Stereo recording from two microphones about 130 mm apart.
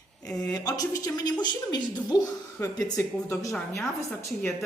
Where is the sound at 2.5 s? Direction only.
20° left (ahead or behind).